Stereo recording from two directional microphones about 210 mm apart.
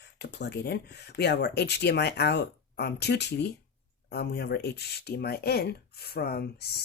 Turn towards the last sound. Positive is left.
turn(degrees=50)  # may be behind; listen again after turning